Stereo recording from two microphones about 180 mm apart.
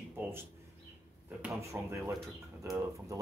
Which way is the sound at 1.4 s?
15° right (ahead or behind).